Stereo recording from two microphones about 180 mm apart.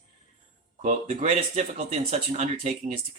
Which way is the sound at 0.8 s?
40° right (ahead or behind).